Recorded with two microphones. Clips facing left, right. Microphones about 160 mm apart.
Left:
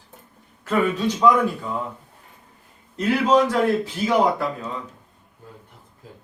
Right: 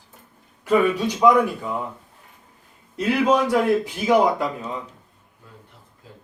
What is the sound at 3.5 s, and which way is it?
Speech, 15° right (ahead or behind).